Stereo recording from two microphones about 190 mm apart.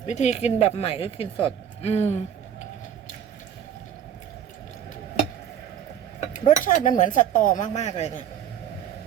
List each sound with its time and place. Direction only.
0.0 s speech: 40° left (ahead or behind)
6.1 s speech: 35° left (ahead or behind)